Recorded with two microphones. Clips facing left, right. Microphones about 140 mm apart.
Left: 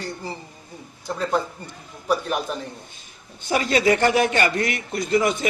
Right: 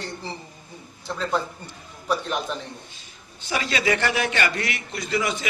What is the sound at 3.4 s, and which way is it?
A man's voice, 50° left (ahead or behind).